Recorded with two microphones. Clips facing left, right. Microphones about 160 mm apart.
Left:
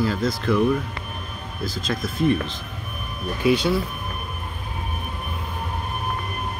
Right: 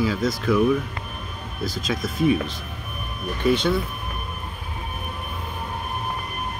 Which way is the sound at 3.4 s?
5° left (ahead or behind).